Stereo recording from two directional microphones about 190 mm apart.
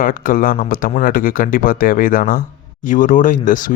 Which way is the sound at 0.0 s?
45° left (ahead or behind).